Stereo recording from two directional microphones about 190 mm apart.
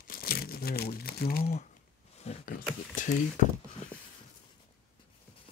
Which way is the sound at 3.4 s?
40° left (ahead or behind).